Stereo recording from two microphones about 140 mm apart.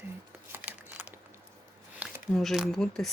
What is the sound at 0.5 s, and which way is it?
Crumpling, 15° right (ahead or behind).